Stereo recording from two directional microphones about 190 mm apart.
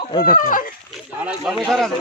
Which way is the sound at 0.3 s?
45° left (ahead or behind).